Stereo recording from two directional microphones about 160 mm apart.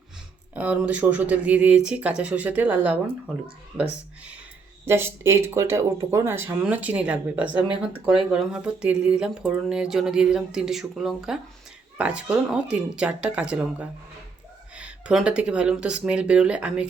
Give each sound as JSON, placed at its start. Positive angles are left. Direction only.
{"t": 0.5, "sound": "speech", "side_deg": -10}